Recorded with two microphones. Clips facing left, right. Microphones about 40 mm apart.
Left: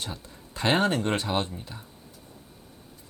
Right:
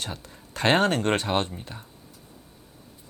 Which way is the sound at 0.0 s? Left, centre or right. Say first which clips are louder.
Right 2 dB; right.